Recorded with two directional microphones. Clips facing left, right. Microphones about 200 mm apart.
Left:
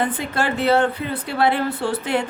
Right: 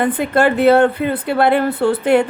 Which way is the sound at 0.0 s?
60° right (ahead or behind).